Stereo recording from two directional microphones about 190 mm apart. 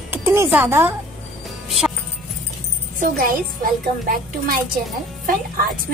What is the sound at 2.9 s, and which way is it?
A woman's voice, 50° right (ahead or behind).